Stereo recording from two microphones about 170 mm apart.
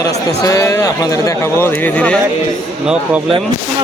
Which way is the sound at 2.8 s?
5° right (ahead or behind).